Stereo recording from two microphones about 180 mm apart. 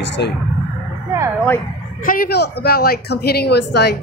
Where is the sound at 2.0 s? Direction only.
50° left (ahead or behind).